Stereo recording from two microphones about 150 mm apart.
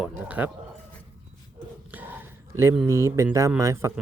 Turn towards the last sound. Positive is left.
turn(degrees=-20)  # may be behind; listen again after turning